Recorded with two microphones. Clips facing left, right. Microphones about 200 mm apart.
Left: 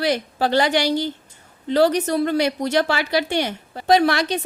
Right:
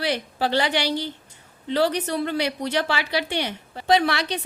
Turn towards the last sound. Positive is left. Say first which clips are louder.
# left 4 dB
turn(degrees=45)  # may be behind; listen again after turning